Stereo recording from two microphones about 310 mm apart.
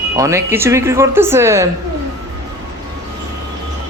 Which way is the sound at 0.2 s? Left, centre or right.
Centre.